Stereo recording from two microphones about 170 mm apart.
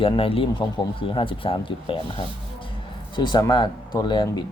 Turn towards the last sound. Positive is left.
turn(degrees=25)  # may be behind; listen again after turning